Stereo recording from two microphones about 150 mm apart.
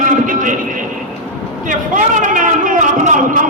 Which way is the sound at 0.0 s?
60° right (ahead or behind).